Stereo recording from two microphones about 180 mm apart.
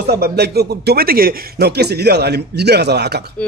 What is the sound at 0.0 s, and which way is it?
A man's voice, 65° right (ahead or behind).